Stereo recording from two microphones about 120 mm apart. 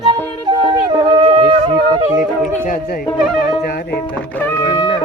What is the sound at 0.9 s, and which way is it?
Wind instrument, 40° right (ahead or behind).